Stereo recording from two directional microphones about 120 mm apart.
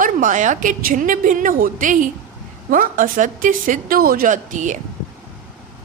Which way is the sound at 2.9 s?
90° right.